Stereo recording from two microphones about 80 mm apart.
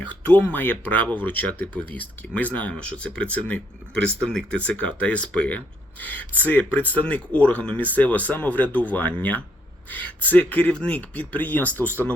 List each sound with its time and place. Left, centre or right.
0.1 s speech: left